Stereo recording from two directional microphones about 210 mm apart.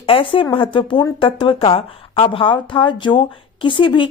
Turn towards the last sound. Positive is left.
turn(degrees=25)  # may be behind; listen again after turning